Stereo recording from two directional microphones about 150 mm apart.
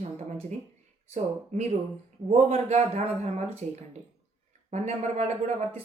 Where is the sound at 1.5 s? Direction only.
50° right (ahead or behind).